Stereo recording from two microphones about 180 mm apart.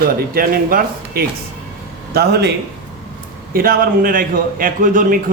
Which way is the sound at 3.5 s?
55° right (ahead or behind).